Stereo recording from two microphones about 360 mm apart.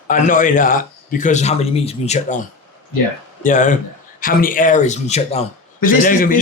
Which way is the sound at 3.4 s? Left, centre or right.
Left.